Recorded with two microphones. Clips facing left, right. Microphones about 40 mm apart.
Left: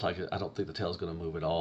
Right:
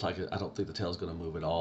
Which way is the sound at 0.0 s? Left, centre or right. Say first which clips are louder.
Left 1 dB; centre.